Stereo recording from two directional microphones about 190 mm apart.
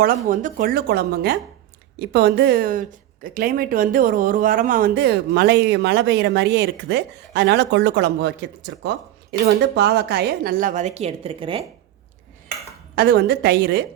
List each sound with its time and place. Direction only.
0.3 s a woman's voice: 45° right (ahead or behind); by 11.6 s 30° right (ahead or behind)
13.0 s speech: 60° right (ahead or behind)